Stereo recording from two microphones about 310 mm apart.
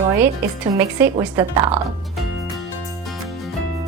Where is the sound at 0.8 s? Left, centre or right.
Centre.